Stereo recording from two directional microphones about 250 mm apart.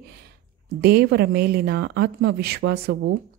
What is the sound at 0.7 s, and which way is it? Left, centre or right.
Speech, right.